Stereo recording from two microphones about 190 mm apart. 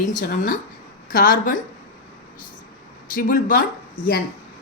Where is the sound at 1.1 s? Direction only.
45° left (ahead or behind).